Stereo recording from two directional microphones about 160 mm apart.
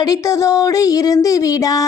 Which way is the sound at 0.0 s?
20° left (ahead or behind).